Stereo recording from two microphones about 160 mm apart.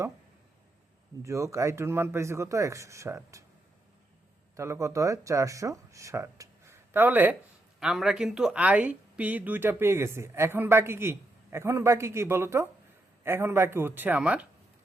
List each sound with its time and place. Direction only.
1.2 s speech: 20° right (ahead or behind)
4.5 s speech: 20° right (ahead or behind)